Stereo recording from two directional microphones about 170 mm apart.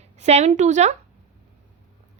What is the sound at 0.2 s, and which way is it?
Speech, 40° right (ahead or behind).